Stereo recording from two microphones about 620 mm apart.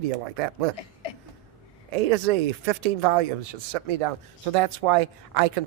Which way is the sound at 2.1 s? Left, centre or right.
Right.